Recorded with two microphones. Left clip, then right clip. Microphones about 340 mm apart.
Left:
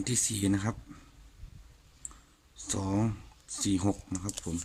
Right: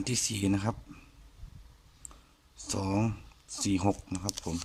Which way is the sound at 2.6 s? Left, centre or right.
Centre.